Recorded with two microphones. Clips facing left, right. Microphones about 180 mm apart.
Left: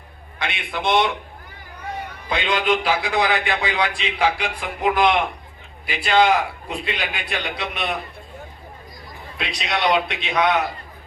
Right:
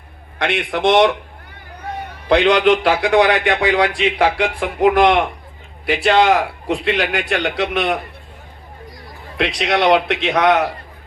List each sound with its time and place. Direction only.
0.3 s a man's voice: 75° right (ahead or behind)
2.3 s a man's voice: 80° right
5.8 s a man's voice: 80° right
9.4 s a man's voice: 80° right